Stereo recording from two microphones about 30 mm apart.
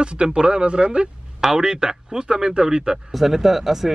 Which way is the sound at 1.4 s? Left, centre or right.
Right.